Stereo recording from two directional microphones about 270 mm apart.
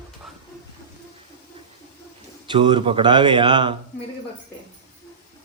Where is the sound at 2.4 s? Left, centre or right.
Centre.